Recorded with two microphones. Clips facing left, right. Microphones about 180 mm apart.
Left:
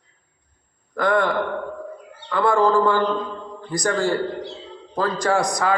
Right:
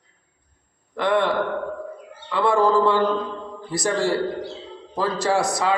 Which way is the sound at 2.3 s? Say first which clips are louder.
Left 1 dB; 5° right (ahead or behind).